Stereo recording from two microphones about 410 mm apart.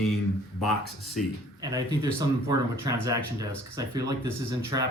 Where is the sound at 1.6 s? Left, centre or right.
Centre.